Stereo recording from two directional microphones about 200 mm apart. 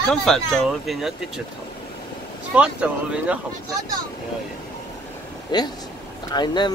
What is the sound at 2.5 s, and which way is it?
Speech, 5° right (ahead or behind).